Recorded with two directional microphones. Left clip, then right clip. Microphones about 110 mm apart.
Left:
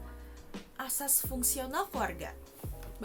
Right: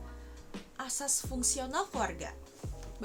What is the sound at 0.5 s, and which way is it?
Speech, centre (ahead or behind).